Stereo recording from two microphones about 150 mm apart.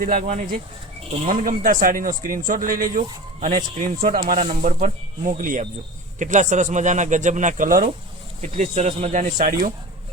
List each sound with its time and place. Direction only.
0.1 s speech: 50° right (ahead or behind)
1.3 s speech: 65° right (ahead or behind)
4.6 s speech: 55° right (ahead or behind)
8.4 s speech: 50° right (ahead or behind)
9.1 s speech: 65° right (ahead or behind)